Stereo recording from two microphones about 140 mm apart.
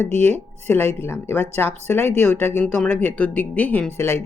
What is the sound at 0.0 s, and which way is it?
Speech, 50° right (ahead or behind).